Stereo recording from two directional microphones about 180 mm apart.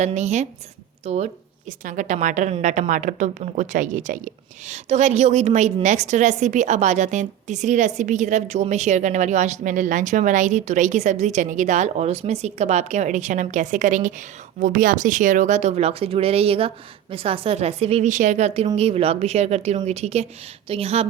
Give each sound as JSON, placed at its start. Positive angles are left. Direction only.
{"t": 0.0, "sound": "a woman's voice", "side_deg": -40}